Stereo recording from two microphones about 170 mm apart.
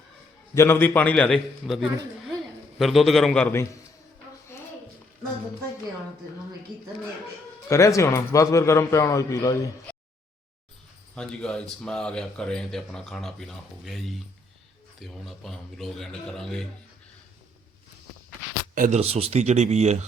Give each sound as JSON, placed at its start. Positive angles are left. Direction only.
{"t": 0.5, "sound": "a man's voice", "side_deg": 15}
{"t": 7.7, "sound": "a man's voice", "side_deg": 20}
{"t": 11.1, "sound": "speech", "side_deg": 5}
{"t": 18.7, "sound": "speech", "side_deg": -45}